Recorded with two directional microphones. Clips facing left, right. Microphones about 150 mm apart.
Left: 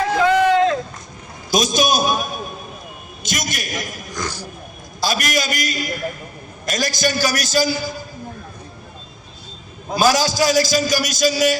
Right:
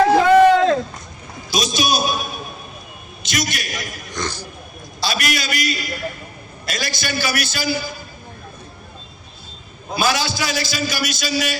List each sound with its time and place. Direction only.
0.1 s a sound: 45° right (ahead or behind)
1.5 s a man's voice: 45° left (ahead or behind)
4.1 s speech: 10° left (ahead or behind)
4.9 s a man's voice: 45° left (ahead or behind)
9.9 s a man's voice: 40° left (ahead or behind)